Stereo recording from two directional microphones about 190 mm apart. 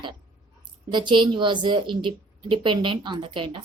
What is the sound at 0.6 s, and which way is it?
Speech, 25° right (ahead or behind).